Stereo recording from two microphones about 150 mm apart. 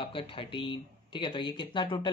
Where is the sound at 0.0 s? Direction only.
35° left (ahead or behind).